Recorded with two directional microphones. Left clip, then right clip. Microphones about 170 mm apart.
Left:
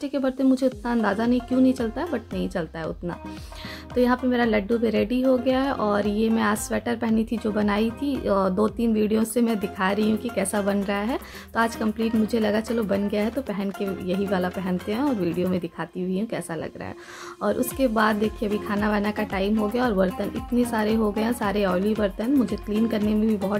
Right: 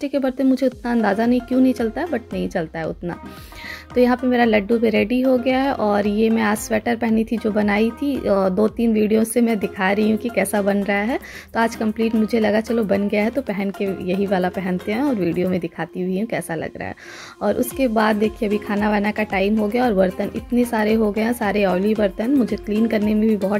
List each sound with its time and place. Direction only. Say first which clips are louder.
0.0 s a woman's voice: right 4 dB; 15° right (ahead or behind)